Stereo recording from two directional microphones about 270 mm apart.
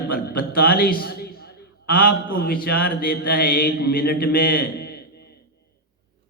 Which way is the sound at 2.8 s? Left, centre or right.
Left.